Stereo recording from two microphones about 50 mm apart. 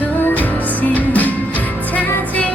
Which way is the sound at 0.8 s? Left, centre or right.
Left.